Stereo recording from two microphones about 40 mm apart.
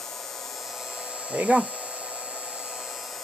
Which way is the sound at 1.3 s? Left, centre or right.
Right.